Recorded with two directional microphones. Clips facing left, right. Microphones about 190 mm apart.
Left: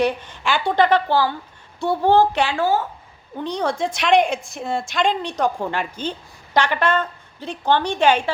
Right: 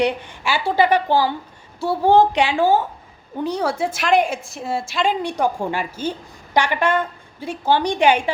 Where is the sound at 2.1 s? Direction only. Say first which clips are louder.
Right 3 dB; 15° right (ahead or behind).